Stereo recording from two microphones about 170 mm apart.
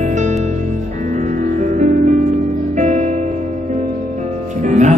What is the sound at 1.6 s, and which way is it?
Music, 45° right (ahead or behind).